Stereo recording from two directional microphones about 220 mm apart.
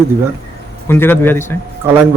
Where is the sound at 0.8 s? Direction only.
10° left (ahead or behind).